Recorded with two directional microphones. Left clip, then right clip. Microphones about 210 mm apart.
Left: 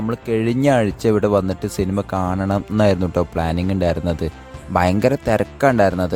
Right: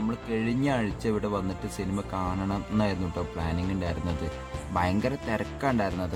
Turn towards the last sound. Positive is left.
turn(degrees=40)  # may be behind; listen again after turning